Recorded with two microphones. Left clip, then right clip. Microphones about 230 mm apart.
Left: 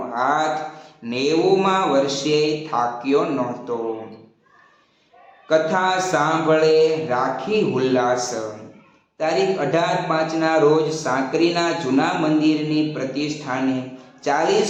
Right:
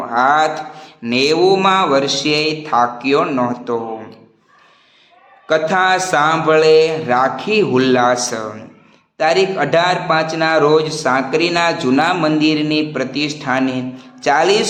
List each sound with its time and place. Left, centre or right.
0.1 s a sound: right
1.0 s a man's voice: right
5.5 s a man's voice: right